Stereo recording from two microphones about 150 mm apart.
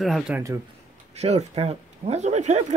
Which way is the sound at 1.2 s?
45° right (ahead or behind).